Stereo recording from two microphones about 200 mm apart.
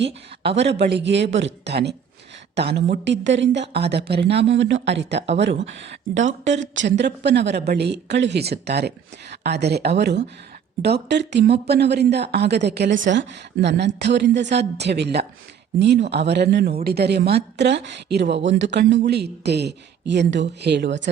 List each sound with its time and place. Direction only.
0.6 s a woman's voice: 55° right (ahead or behind)